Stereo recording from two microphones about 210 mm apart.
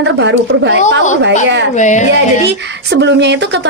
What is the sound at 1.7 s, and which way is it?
Speech, 35° left (ahead or behind).